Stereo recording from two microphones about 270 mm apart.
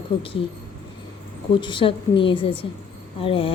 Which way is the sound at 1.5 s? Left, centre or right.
Centre.